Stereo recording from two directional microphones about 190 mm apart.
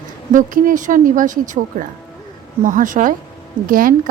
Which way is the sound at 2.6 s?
45° right (ahead or behind).